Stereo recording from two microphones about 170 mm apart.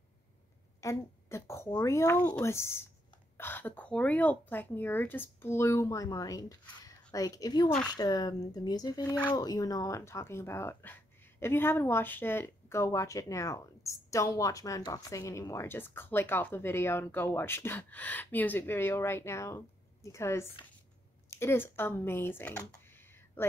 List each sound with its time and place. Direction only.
0.7 s speech: 15° left (ahead or behind)